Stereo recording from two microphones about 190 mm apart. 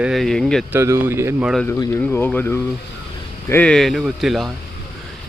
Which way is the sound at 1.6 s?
10° left (ahead or behind).